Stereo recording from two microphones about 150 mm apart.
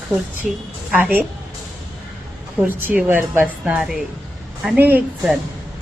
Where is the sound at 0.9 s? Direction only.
10° right (ahead or behind).